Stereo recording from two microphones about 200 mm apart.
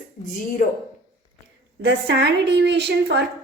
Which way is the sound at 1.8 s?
60° right (ahead or behind).